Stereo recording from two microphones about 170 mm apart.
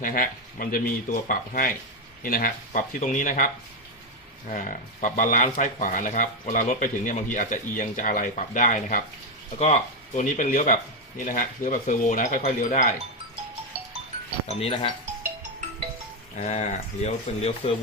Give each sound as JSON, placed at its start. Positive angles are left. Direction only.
{"t": 0.0, "sound": "speech", "side_deg": 55}
{"t": 14.4, "sound": "speech", "side_deg": 35}
{"t": 16.4, "sound": "speech", "side_deg": 45}